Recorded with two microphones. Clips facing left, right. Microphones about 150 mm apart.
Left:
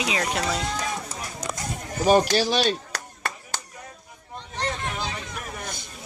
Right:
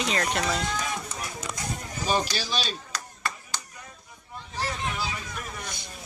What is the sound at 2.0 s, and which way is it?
Clapping, 55° left (ahead or behind).